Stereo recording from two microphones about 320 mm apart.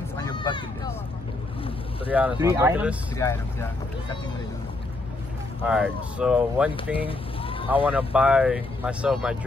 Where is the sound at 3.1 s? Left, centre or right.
Centre.